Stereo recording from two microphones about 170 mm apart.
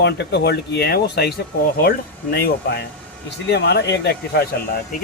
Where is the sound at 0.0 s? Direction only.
85° left.